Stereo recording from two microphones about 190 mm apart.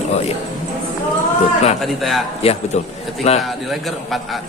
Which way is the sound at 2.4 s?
30° left (ahead or behind).